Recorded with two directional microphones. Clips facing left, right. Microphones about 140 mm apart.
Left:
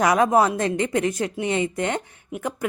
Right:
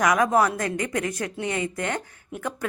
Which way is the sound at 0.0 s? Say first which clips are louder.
Left 2 dB; 25° left (ahead or behind).